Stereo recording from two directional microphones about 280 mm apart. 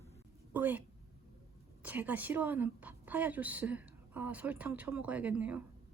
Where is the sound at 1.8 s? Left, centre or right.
Centre.